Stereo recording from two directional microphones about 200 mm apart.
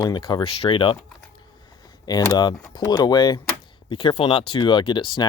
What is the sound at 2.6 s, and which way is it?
Speech, 20° left (ahead or behind).